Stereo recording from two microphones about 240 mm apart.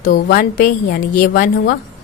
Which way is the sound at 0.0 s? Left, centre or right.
Left.